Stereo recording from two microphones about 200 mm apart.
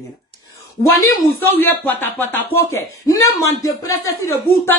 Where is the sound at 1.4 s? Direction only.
10° left (ahead or behind).